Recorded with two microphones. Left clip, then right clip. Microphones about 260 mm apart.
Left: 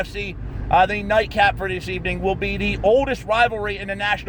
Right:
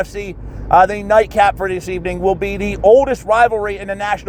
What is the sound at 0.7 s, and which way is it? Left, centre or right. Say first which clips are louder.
Speech: right 6 dB; centre.